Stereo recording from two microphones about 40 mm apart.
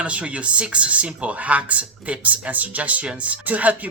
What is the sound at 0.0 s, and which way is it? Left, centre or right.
Speech, right.